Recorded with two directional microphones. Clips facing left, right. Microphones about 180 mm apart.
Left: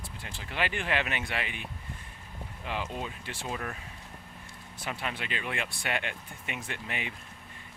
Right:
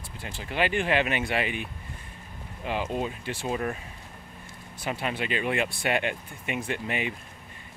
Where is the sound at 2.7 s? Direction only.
10° right (ahead or behind).